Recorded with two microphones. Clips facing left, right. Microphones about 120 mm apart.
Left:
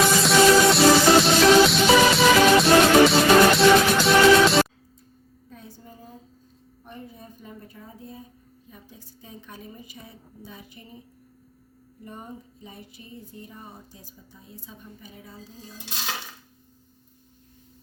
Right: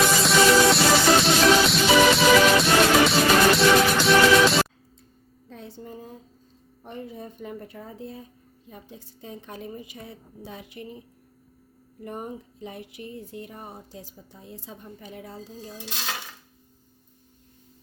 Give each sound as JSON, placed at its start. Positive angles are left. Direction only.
{"t": 0.2, "sound": "music", "side_deg": 0}
{"t": 5.5, "sound": "a sound", "side_deg": -70}
{"t": 6.8, "sound": "a woman's voice", "side_deg": -75}
{"t": 9.2, "sound": "a woman's voice", "side_deg": -20}
{"t": 9.7, "sound": "a woman's voice", "side_deg": -60}
{"t": 12.0, "sound": "music", "side_deg": -65}